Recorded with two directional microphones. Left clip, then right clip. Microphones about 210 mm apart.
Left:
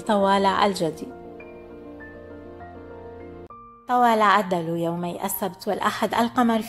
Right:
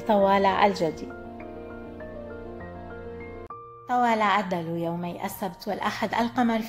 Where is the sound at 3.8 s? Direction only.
20° left (ahead or behind).